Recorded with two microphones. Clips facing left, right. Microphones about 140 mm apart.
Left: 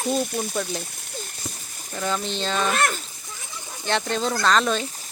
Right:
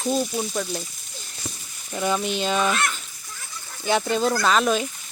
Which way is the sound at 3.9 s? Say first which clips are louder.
Right 3 dB; 10° right (ahead or behind).